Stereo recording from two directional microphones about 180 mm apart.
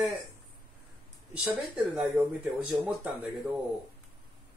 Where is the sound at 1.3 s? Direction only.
10° right (ahead or behind).